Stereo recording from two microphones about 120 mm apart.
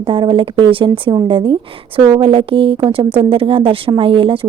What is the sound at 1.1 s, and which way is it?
Speech, 30° right (ahead or behind).